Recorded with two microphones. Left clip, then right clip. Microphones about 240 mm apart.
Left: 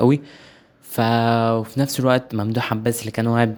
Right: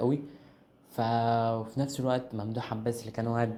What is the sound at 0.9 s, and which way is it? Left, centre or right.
Speech, left.